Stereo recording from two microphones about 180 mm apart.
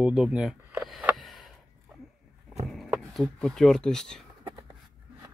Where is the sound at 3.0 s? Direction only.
5° left (ahead or behind).